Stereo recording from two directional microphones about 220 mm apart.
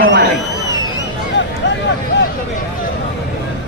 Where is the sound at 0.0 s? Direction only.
55° right (ahead or behind).